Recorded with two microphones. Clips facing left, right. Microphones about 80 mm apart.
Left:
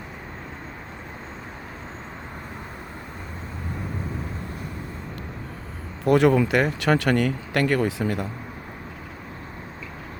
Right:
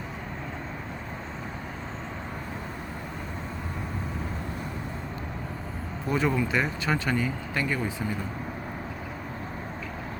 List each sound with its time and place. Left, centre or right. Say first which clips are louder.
6.1 s speech: left 9 dB; left